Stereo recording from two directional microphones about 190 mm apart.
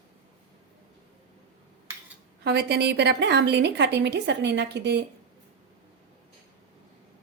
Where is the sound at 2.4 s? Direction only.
60° right (ahead or behind).